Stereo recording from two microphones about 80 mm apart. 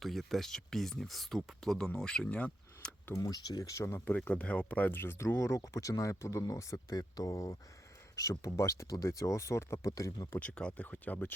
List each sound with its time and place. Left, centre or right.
0.0 s speech: centre
3.2 s speech: left
4.3 s speech: centre
5.4 s speech: left
10.4 s speech: centre